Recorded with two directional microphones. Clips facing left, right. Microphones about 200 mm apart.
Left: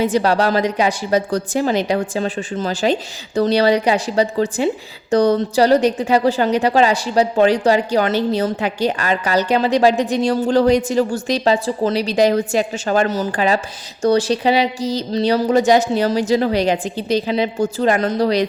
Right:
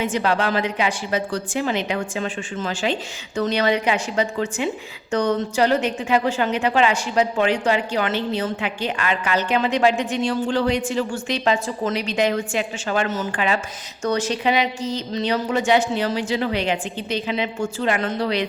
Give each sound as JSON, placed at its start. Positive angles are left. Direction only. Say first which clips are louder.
{"t": 0.0, "sound": "a woman's voice", "louder": "left 5 dB", "side_deg": 35}